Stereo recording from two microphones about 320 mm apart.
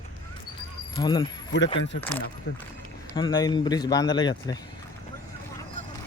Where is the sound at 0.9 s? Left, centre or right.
Centre.